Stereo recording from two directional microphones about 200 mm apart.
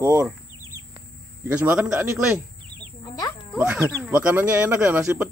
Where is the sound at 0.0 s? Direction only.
15° right (ahead or behind).